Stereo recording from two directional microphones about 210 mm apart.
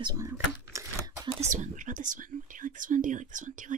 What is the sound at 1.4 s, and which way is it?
Whispering, 35° right (ahead or behind).